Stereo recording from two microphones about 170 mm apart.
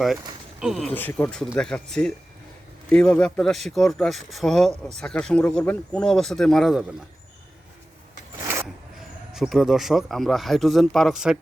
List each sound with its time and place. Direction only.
0.6 s speech: centre (ahead or behind)
0.9 s speech: 10° left (ahead or behind)
8.4 s a sound: 15° right (ahead or behind)
8.6 s speech: 5° right (ahead or behind)